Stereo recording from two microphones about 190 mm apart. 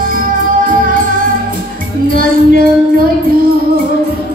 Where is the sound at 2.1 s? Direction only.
45° right (ahead or behind).